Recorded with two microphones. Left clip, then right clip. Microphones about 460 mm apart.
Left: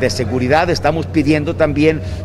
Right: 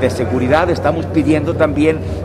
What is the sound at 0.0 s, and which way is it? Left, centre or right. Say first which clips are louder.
Speech: right 1 dB; left.